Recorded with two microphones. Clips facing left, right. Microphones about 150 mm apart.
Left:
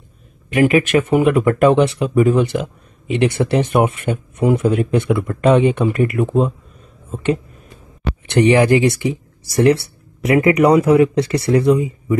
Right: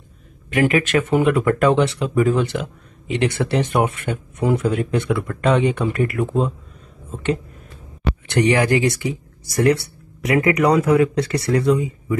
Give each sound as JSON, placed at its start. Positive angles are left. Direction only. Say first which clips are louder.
{"t": 0.5, "sound": "speech", "louder": "left 4 dB", "side_deg": 20}
{"t": 8.3, "sound": "speech", "louder": "left 5 dB", "side_deg": 20}
{"t": 10.2, "sound": "speech", "louder": "left 4 dB", "side_deg": 30}